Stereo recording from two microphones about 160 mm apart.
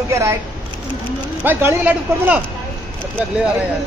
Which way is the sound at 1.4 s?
10° right (ahead or behind).